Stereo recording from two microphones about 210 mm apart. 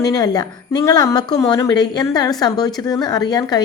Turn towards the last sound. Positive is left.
turn(degrees=20)  # may be behind; listen again after turning